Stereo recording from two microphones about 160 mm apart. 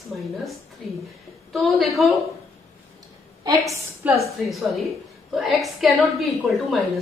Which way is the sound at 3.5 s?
20° right (ahead or behind).